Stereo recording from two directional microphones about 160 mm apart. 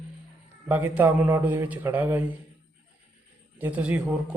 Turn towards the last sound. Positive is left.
turn(degrees=-5)  # may be behind; listen again after turning